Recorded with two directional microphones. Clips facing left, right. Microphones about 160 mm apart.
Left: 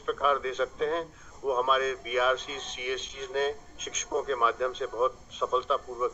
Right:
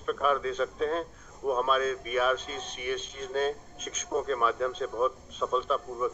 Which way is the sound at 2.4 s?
40° right (ahead or behind).